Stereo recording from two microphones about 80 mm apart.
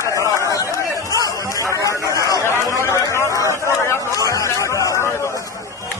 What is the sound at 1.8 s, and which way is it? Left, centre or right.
Chatter, left.